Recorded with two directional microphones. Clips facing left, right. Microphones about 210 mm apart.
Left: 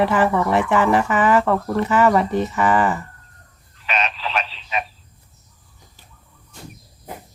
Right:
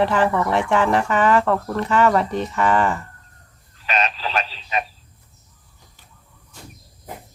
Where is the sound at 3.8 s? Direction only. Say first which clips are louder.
Right 1 dB; 40° right (ahead or behind).